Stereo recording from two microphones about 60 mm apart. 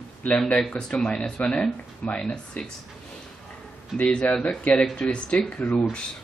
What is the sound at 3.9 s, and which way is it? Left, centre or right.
Speech, left.